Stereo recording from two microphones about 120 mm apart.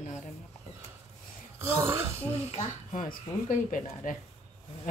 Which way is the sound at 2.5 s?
65° left (ahead or behind).